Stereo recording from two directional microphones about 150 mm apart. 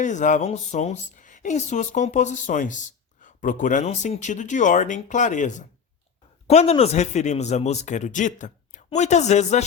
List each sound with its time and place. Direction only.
0.0 s speech: 55° left (ahead or behind)
6.5 s a man's voice: 45° left (ahead or behind)